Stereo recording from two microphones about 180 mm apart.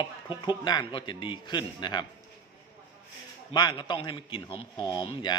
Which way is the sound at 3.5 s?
25° left (ahead or behind).